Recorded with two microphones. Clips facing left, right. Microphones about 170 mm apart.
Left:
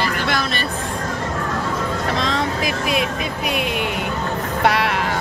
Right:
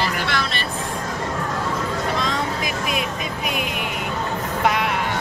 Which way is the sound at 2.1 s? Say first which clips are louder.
Left 3 dB; 90° left.